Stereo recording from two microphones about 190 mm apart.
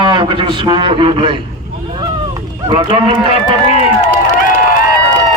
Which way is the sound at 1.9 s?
25° right (ahead or behind).